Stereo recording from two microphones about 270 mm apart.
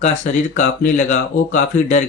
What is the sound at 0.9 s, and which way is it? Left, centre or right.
Speech, left.